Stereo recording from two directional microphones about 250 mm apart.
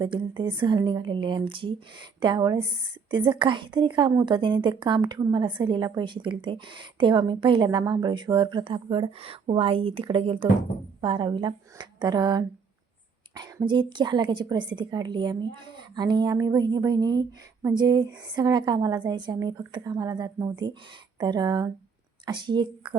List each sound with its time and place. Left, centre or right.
0.0 s a woman's voice: centre